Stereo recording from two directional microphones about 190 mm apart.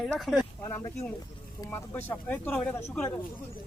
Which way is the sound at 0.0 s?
Centre (ahead or behind).